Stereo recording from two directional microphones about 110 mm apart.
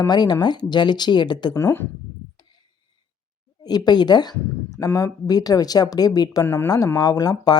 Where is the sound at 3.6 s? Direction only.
35° left (ahead or behind).